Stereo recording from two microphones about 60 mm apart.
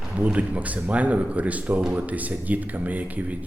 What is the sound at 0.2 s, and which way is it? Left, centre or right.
Speech, right.